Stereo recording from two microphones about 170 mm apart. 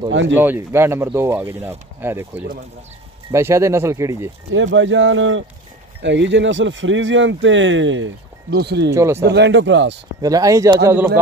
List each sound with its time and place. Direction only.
0.3 s speech: 10° right (ahead or behind)
4.6 s speech: 90° right
8.9 s speech: 15° right (ahead or behind)
9.2 s speech: 90° right
10.2 s speech: 20° right (ahead or behind)